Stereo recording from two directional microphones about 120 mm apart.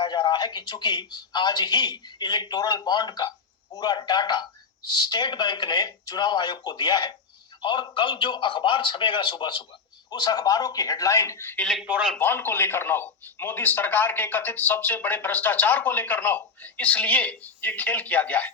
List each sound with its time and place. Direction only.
0.0 s a man's voice: 40° left (ahead or behind); by 11.6 s 20° left (ahead or behind)
11.6 s a man's voice: centre (ahead or behind)
12.2 s speech: 15° left (ahead or behind)